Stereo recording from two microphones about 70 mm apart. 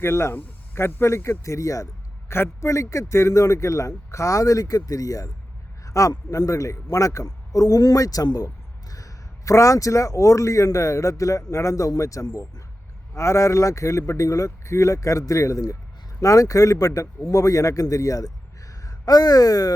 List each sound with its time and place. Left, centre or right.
0.0 s speech: left
2.3 s speech: left
8.4 s speech: left